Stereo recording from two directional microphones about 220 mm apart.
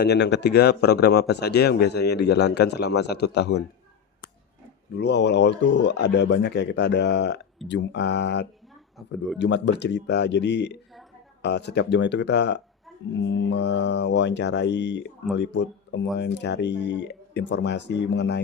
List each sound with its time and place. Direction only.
0.0 s speech: 50° left (ahead or behind)
4.9 s speech: 50° left (ahead or behind)
9.0 s speech: centre (ahead or behind)
9.4 s speech: 50° left (ahead or behind)